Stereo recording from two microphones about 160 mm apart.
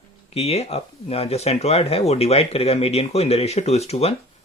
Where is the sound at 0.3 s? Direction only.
40° left (ahead or behind).